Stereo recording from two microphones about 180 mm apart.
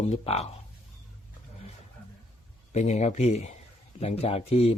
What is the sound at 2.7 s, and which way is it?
A man's voice, 40° left (ahead or behind).